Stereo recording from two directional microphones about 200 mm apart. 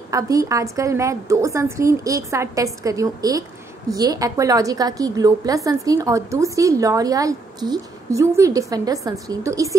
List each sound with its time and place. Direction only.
0.1 s a woman's voice: 15° right (ahead or behind)